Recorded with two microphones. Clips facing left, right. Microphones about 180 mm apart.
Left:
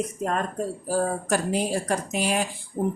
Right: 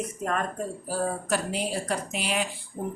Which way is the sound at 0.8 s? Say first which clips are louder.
Left 3 dB; 45° left (ahead or behind).